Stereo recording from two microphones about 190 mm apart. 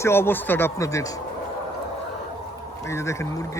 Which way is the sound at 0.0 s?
10° left (ahead or behind).